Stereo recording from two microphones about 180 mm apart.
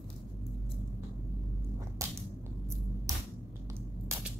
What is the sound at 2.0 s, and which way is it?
Whip, 15° right (ahead or behind).